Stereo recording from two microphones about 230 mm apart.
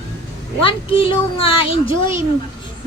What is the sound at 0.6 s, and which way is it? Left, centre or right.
A woman's voice, left.